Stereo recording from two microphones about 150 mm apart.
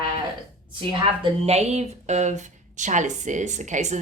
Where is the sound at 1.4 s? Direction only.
45° right (ahead or behind).